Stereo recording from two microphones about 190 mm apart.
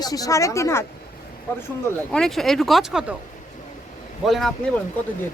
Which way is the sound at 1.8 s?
5° left (ahead or behind).